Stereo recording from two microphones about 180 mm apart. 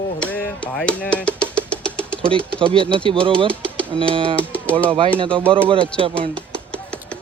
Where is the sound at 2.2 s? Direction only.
30° right (ahead or behind).